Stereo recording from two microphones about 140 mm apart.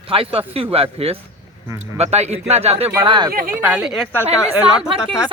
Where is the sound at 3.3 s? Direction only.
90° right.